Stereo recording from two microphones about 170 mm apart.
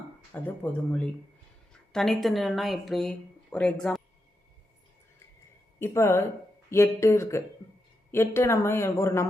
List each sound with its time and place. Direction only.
0.4 s speech: 10° left (ahead or behind)
5.8 s speech: 15° left (ahead or behind)